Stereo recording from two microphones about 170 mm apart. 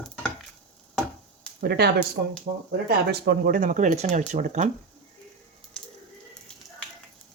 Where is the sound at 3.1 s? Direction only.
65° right (ahead or behind); by 4.7 s 45° right (ahead or behind).